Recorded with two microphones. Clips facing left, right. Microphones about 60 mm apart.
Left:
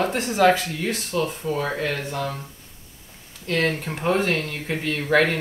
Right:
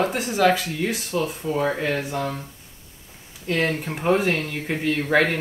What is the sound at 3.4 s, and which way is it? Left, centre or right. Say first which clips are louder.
Speech: even; centre.